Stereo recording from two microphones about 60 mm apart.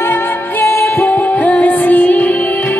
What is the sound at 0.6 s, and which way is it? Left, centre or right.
Music, left.